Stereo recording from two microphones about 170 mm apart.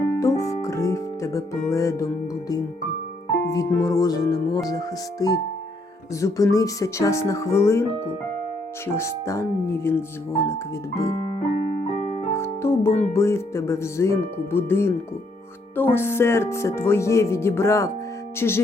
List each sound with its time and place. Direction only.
0.2 s music: 20° left (ahead or behind)
3.5 s music: 15° left (ahead or behind)
6.1 s speech: 20° left (ahead or behind)
8.9 s speech: 15° left (ahead or behind)
12.3 s music: 15° left (ahead or behind)
12.8 s speech: 15° left (ahead or behind)